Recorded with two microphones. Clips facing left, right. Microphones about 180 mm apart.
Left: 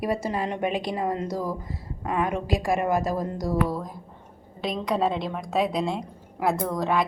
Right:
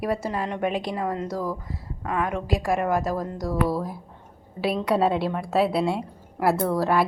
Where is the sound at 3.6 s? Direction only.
10° right (ahead or behind).